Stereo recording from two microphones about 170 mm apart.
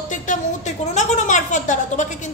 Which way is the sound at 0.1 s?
45° left (ahead or behind).